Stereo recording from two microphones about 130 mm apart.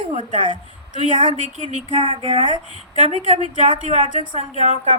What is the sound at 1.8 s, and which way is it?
A woman's voice, 40° right (ahead or behind).